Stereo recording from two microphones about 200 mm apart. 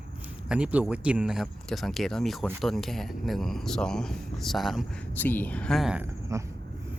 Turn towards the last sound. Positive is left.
turn(degrees=-10)  # may be behind; listen again after turning